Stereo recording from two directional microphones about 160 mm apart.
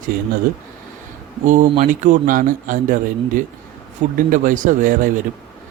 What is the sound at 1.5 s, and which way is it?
A man's voice, 55° right (ahead or behind).